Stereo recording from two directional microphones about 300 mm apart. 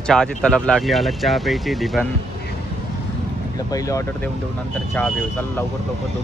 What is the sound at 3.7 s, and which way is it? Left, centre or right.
Speech, centre.